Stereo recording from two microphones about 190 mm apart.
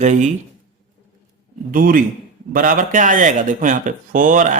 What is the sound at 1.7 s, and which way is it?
Speech, 45° right (ahead or behind).